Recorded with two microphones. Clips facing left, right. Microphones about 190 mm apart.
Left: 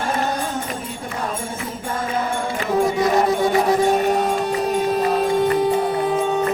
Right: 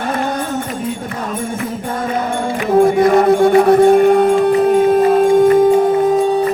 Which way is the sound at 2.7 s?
55° right (ahead or behind).